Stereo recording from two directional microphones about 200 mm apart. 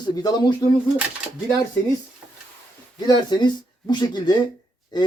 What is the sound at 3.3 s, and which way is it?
A man's voice, 20° left (ahead or behind).